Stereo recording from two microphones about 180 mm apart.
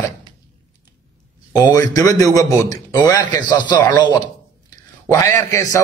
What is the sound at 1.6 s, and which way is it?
Speech, 20° left (ahead or behind).